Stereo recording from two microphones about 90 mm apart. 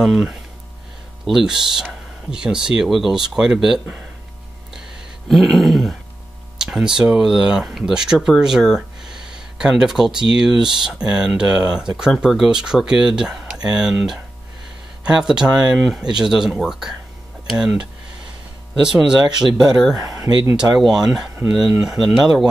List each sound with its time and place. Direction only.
0.0 s speech: 5° right (ahead or behind)
5.3 s speech: centre (ahead or behind)
20.0 s speech: 40° right (ahead or behind)
20.7 s speech: 5° right (ahead or behind)